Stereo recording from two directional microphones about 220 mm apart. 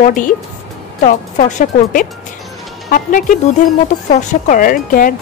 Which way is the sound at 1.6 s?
35° left (ahead or behind).